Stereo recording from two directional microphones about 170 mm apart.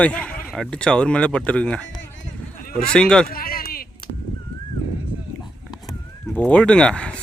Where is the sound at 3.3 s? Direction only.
60° left (ahead or behind).